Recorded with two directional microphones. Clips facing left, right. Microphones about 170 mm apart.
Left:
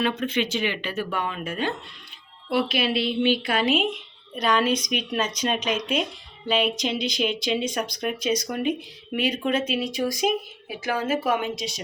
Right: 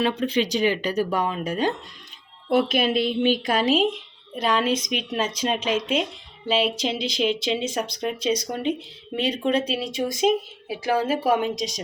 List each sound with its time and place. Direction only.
0.2 s a woman's voice: 35° right (ahead or behind)